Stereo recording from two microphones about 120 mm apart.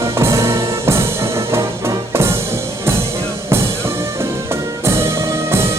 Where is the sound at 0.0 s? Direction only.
25° right (ahead or behind).